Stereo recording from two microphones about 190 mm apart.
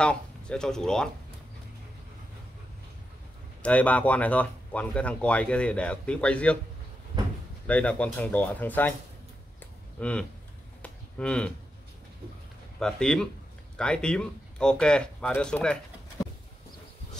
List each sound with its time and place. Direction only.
0.0 s speech: 5° left (ahead or behind)
3.6 s speech: 5° left (ahead or behind)
7.1 s door: 25° right (ahead or behind)
7.6 s speech: 5° left (ahead or behind)
9.6 s a sound: 5° left (ahead or behind)
12.7 s speech: 5° left (ahead or behind)